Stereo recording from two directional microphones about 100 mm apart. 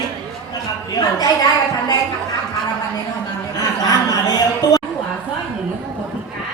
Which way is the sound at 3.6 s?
40° left (ahead or behind).